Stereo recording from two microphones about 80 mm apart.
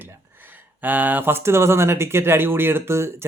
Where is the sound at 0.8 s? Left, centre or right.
Right.